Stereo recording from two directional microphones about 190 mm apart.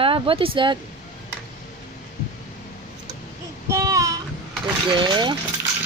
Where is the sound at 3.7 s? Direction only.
15° right (ahead or behind).